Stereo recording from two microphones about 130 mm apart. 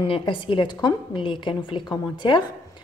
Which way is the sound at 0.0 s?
40° left (ahead or behind).